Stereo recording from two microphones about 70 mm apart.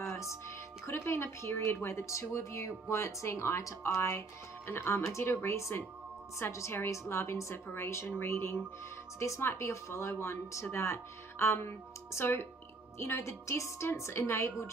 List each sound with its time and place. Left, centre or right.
0.0 s music: left
0.8 s speech: left